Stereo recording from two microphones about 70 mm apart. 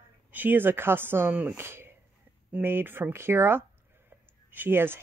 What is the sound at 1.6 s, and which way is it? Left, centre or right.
Speech, right.